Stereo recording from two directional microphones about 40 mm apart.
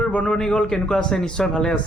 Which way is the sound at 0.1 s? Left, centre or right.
Left.